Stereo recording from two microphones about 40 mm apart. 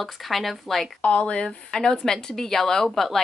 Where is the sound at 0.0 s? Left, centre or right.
Centre.